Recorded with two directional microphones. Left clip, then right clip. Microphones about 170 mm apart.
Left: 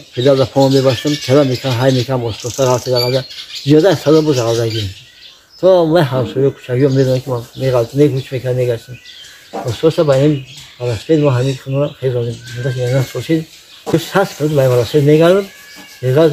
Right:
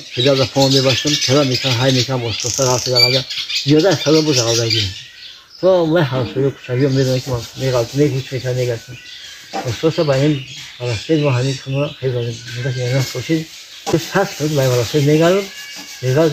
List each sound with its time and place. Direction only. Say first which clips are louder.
0.1 s speech: left 3 dB; 35° left (ahead or behind)
9.8 s speech: left 5 dB; 30° left (ahead or behind)